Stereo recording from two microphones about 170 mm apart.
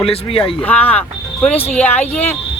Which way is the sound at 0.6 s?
10° left (ahead or behind).